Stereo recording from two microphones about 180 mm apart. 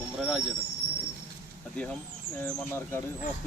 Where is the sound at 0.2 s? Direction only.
Centre (ahead or behind).